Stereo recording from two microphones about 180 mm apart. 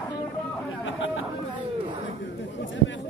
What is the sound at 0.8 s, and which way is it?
Speech, 90° left.